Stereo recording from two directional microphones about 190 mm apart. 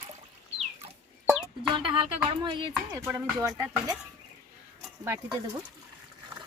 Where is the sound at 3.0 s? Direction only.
15° right (ahead or behind).